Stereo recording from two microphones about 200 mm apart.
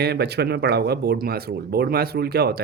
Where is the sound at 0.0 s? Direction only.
55° right (ahead or behind).